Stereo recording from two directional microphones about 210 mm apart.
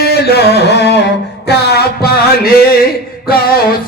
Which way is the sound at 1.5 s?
50° left (ahead or behind).